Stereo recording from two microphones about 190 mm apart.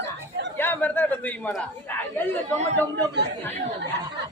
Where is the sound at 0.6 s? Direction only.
10° left (ahead or behind).